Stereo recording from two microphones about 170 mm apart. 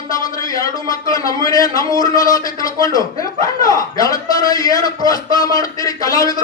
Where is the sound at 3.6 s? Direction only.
20° left (ahead or behind).